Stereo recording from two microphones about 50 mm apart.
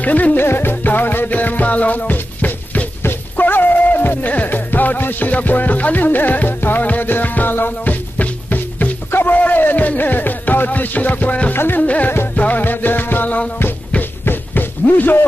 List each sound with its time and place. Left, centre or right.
0.0 s music: left
0.5 s music: left
11.5 s music: left
11.8 s music: left
14.2 s a sound: left